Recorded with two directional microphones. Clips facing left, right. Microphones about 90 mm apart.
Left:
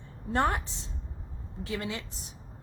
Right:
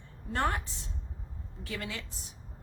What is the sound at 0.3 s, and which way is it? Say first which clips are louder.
A woman's voice: left 4 dB; 20° left (ahead or behind).